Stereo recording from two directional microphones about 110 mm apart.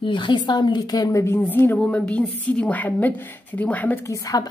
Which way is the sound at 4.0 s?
30° left (ahead or behind).